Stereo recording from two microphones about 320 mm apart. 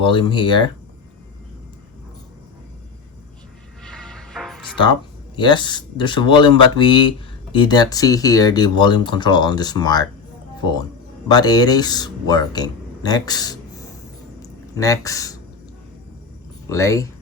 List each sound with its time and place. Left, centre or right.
0.0 s speech: centre
3.8 s music: centre
5.4 s speech: centre
11.3 s speech: centre
16.6 s speech: centre